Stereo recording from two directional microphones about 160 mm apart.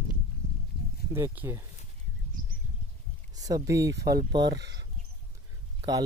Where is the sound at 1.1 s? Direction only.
15° right (ahead or behind).